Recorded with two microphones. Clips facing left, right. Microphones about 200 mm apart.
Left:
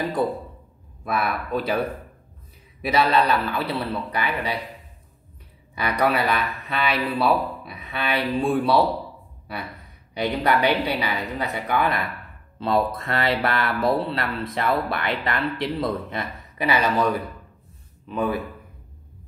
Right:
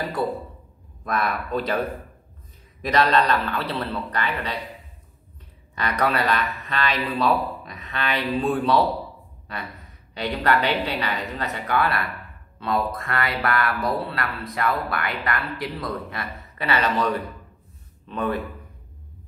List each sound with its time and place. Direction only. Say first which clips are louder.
1.0 s a man's voice: even; 5° left (ahead or behind)
5.8 s a man's voice: left 1 dB; 10° left (ahead or behind)
10.1 s a man's voice: left 1 dB; 15° left (ahead or behind)
12.5 s a man's voice: left 3 dB; 30° left (ahead or behind); by 18.4 s 10° left (ahead or behind)